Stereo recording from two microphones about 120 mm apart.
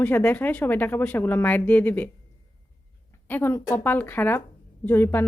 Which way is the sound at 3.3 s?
15° left (ahead or behind).